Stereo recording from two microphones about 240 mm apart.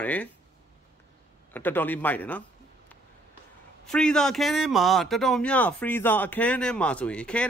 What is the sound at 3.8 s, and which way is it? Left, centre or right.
Speech, centre.